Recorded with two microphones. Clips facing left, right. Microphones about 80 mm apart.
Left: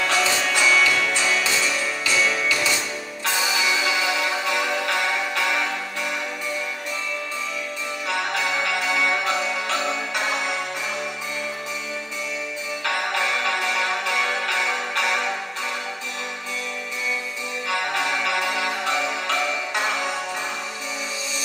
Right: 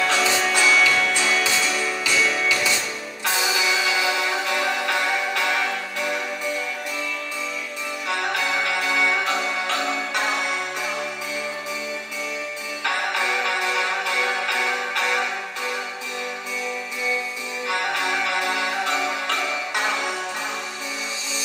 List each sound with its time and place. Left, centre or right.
0.1 s music: centre
0.4 s music: centre